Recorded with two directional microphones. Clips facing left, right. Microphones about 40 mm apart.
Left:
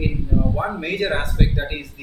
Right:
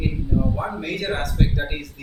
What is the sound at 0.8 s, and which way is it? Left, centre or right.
Speech, left.